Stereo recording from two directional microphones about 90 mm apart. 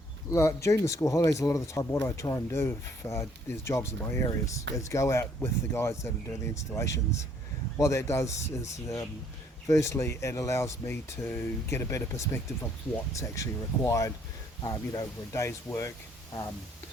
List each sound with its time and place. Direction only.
0.3 s speech: 35° left (ahead or behind)